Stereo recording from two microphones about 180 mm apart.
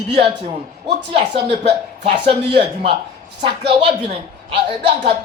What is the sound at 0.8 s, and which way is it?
Speech, 35° right (ahead or behind).